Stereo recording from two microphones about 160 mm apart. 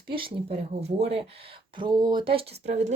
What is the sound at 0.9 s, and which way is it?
Speech, 40° right (ahead or behind).